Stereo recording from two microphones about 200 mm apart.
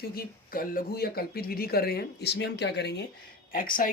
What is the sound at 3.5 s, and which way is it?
Speech, 45° left (ahead or behind).